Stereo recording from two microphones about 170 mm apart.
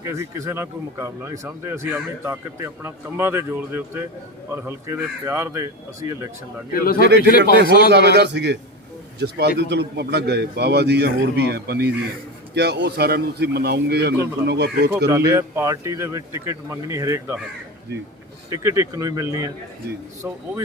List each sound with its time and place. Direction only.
0.0 s speech: 20° right (ahead or behind)
6.7 s speech: 60° left (ahead or behind)
7.9 s a man's voice: 80° right
15.1 s speech: 20° right (ahead or behind)
18.5 s speech: 15° right (ahead or behind)